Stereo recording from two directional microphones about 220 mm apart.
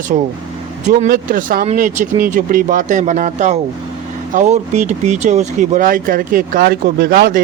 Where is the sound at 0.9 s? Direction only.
40° right (ahead or behind).